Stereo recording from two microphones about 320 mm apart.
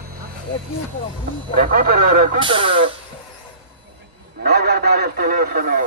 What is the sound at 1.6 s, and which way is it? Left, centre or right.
Speech, right.